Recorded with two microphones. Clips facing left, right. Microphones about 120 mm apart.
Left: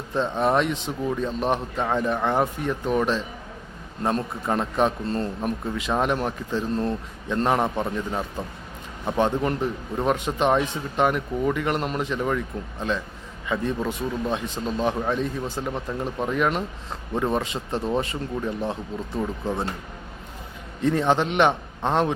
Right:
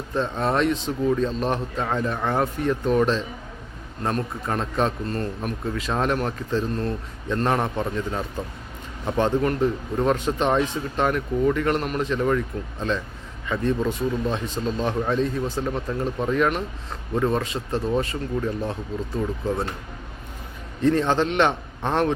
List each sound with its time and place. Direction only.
0.1 s speech: 15° left (ahead or behind)
20.8 s speech: 15° left (ahead or behind)